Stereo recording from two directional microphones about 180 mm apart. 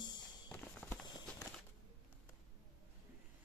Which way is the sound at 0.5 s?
10° left (ahead or behind).